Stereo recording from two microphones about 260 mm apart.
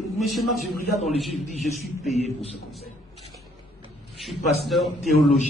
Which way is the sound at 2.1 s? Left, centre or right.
Left.